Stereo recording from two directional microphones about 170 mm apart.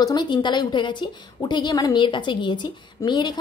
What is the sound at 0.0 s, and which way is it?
A woman's voice, 25° left (ahead or behind).